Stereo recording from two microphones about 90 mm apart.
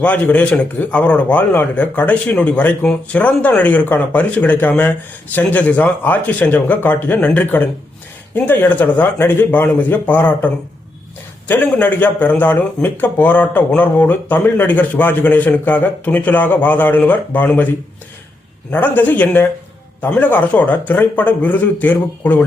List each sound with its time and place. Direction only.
0.0 s a man's voice: 15° left (ahead or behind)
18.7 s a man's voice: 20° left (ahead or behind)